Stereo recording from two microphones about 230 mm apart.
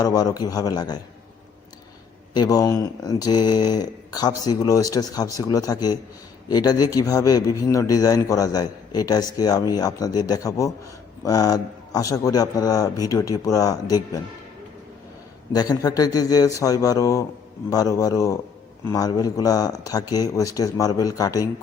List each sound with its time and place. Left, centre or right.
0.0 s speech: centre
2.3 s speech: centre
15.5 s speech: centre